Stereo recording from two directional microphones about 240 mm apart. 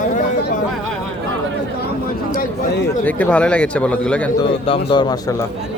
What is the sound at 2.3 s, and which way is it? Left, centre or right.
Speech, left.